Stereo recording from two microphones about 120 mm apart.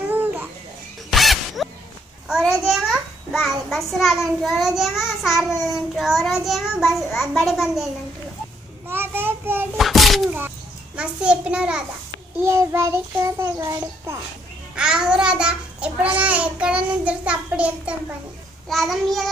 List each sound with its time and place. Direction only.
0.1 s babbling: 15° right (ahead or behind)
1.1 s music: centre (ahead or behind)
2.2 s a child's voice: centre (ahead or behind)
8.8 s child singing: 20° right (ahead or behind)
9.8 s a sound: centre (ahead or behind)
11.0 s a child's voice: 10° right (ahead or behind)
12.4 s a child's voice: 20° right (ahead or behind)
14.8 s a child's voice: 5° right (ahead or behind)